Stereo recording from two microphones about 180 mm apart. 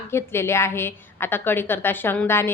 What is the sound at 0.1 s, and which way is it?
A woman's voice, 15° left (ahead or behind).